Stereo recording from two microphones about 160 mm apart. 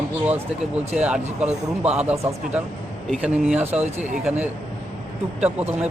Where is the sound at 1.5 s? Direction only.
40° right (ahead or behind).